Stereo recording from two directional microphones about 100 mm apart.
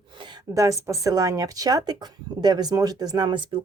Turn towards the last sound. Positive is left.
turn(degrees=-45)  # may be behind; listen again after turning